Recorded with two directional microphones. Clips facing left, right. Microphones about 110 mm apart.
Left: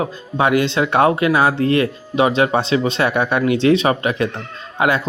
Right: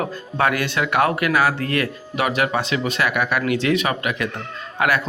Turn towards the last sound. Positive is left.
turn(degrees=25)  # may be behind; listen again after turning